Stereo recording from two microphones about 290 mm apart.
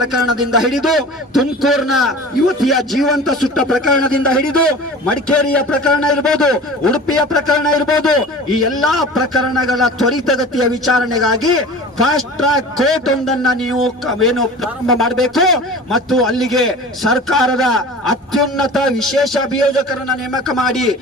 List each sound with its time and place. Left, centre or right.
0.0 s a man's voice: centre